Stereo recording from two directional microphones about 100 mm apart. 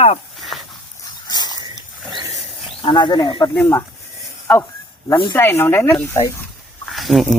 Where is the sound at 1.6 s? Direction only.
45° right (ahead or behind).